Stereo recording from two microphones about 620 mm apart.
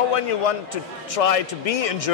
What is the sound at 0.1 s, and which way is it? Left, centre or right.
A man's voice, left.